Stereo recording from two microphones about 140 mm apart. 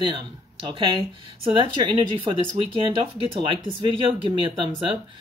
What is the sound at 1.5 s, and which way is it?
Speech, 35° right (ahead or behind).